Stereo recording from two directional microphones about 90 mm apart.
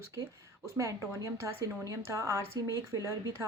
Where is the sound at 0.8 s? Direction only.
35° right (ahead or behind).